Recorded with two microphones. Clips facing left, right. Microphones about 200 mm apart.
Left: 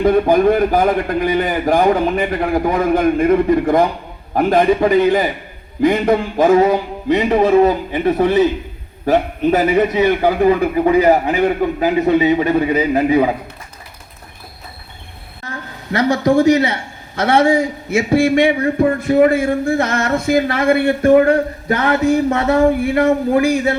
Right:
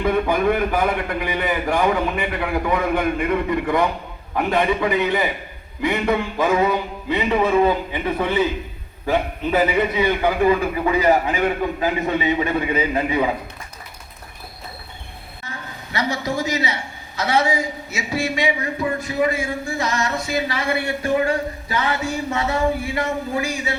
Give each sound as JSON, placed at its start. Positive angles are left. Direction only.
{"t": 0.0, "sound": "a man's voice", "side_deg": 40}
{"t": 15.4, "sound": "a man's voice", "side_deg": 55}